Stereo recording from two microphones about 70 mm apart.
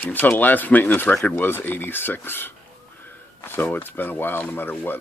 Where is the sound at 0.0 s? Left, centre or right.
Left.